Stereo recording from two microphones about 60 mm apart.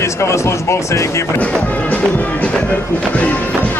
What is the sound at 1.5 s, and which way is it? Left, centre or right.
Speech, left.